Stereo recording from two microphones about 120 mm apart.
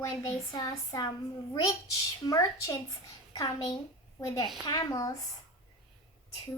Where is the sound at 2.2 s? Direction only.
30° left (ahead or behind).